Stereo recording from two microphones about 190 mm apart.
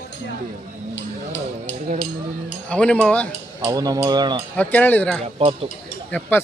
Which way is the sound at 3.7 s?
20° right (ahead or behind).